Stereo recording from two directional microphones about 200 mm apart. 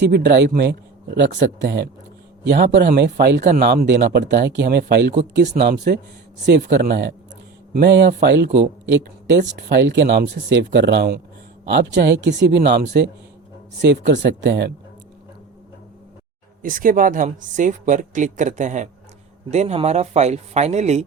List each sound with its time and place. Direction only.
0.0 s speech: 55° right (ahead or behind)
2.5 s speech: 50° right (ahead or behind)
9.6 s speech: 65° right (ahead or behind)
14.1 s speech: 60° right (ahead or behind)
16.6 s speech: 45° right (ahead or behind)